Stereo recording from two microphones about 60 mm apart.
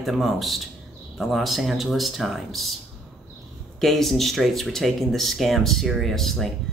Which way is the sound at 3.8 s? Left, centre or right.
Centre.